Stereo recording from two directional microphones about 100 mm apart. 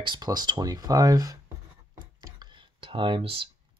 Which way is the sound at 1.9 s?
45° right (ahead or behind).